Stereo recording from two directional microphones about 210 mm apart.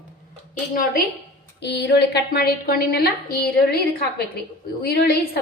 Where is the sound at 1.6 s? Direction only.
55° left (ahead or behind).